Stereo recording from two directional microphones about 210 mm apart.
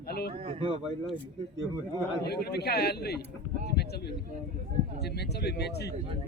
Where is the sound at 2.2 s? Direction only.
50° left (ahead or behind).